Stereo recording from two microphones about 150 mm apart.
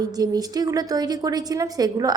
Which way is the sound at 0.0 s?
25° right (ahead or behind).